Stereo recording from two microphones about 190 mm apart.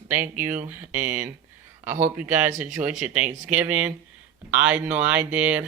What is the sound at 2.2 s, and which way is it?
Speech, 10° right (ahead or behind).